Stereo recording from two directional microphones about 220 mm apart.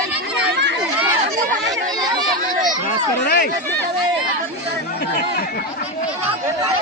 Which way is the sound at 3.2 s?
45° left (ahead or behind).